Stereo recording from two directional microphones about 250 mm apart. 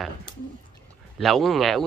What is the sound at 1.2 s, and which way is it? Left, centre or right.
Speech, centre.